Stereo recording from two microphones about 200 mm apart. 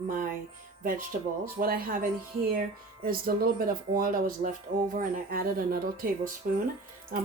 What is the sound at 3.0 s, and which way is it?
Speech, 45° right (ahead or behind).